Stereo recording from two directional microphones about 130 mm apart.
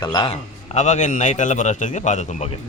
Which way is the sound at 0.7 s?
65° left (ahead or behind).